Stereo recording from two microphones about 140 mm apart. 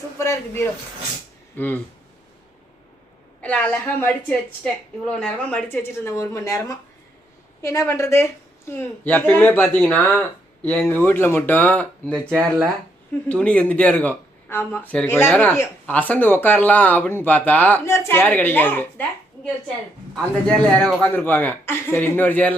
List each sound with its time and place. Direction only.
0.2 s a man's voice: 20° left (ahead or behind)
3.4 s speech: 10° left (ahead or behind)
20.1 s speech: 5° left (ahead or behind)